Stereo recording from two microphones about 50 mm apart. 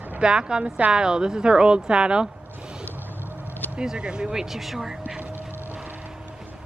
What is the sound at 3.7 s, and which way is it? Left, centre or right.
Speech, centre.